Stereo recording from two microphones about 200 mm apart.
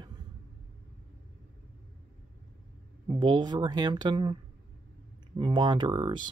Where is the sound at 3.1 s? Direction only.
20° right (ahead or behind).